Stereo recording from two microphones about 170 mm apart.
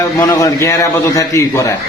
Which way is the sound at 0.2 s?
20° left (ahead or behind).